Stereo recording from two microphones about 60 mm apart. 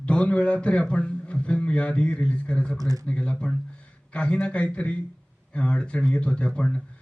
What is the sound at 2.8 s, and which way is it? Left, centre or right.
Speech, right.